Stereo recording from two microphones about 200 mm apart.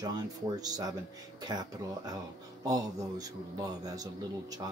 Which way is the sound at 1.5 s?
20° right (ahead or behind).